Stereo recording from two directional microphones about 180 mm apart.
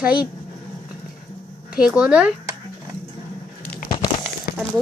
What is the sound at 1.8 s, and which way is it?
Speech, 5° right (ahead or behind).